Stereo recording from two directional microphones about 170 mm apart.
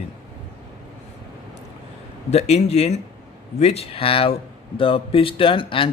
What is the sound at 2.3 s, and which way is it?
Speech, 40° left (ahead or behind).